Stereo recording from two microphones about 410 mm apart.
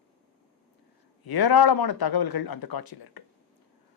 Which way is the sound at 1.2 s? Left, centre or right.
Left.